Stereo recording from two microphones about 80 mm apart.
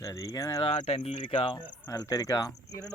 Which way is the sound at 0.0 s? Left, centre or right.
Left.